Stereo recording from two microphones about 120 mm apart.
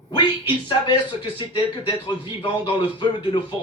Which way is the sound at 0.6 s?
40° left (ahead or behind).